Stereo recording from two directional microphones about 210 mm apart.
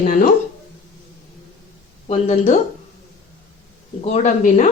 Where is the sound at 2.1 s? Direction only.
35° left (ahead or behind).